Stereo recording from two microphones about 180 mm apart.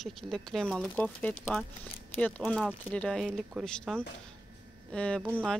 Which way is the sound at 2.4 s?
Centre (ahead or behind).